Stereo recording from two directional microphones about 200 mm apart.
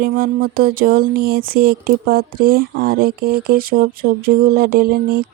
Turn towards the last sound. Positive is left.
turn(degrees=-50)  # may be behind; listen again after turning